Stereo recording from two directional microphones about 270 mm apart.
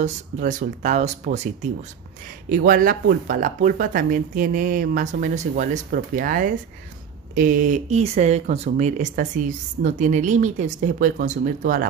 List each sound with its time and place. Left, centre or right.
0.0 s speech: right
2.6 s speech: right